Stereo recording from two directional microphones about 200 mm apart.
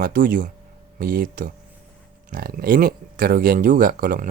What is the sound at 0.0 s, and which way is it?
Speech, 45° right (ahead or behind).